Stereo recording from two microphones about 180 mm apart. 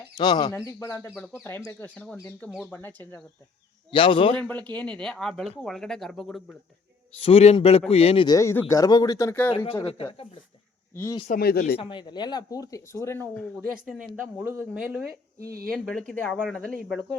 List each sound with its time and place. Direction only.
0.2 s speech: 25° left (ahead or behind)
3.9 s speech: 30° left (ahead or behind)
4.4 s speech: 5° left (ahead or behind)
7.1 s a man's voice: 30° left (ahead or behind)
8.4 s speech: 15° left (ahead or behind)
9.8 s a man's voice: 30° left (ahead or behind)
10.9 s speech: 15° left (ahead or behind)
11.3 s speech: 60° left (ahead or behind)
11.8 s speech: 25° left (ahead or behind); by 13.6 s 5° left (ahead or behind)
13.8 s speech: 10° right (ahead or behind)
15.7 s speech: 5° left (ahead or behind)